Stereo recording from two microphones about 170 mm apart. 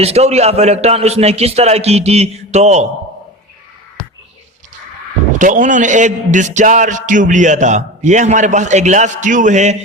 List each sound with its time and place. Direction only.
0.0 s a man's voice: 40° right (ahead or behind)
5.4 s a man's voice: 50° right (ahead or behind)